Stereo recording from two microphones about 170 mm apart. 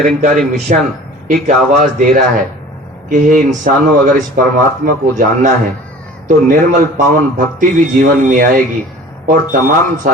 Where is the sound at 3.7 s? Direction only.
55° right (ahead or behind).